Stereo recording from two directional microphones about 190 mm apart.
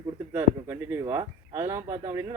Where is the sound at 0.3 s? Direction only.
15° right (ahead or behind).